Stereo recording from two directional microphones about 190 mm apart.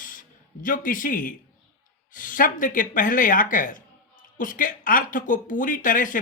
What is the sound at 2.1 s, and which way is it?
Speech, 45° left (ahead or behind).